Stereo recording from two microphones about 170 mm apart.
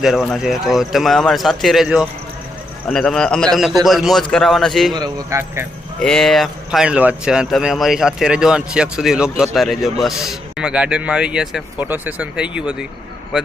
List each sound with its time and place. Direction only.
0.0 s speech: centre (ahead or behind)
4.9 s speech: 20° right (ahead or behind)
6.0 s speech: 5° left (ahead or behind)